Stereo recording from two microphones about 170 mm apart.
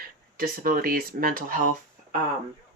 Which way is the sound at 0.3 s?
55° right (ahead or behind).